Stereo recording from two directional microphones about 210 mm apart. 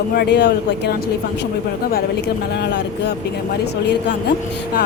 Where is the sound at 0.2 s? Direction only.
50° left (ahead or behind).